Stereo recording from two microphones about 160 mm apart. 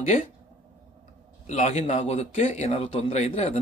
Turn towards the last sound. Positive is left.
turn(degrees=45)  # may be behind; listen again after turning